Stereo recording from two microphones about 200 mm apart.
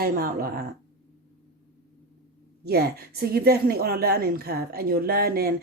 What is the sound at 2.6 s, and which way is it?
A woman's voice, 50° right (ahead or behind).